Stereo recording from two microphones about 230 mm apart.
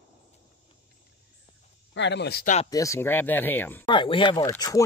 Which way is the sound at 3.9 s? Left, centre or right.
Left.